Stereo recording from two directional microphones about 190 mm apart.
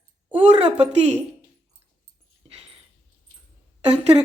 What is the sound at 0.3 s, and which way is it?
Speech, 30° right (ahead or behind).